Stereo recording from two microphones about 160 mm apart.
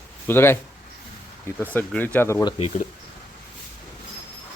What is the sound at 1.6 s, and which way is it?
Speech, 10° left (ahead or behind).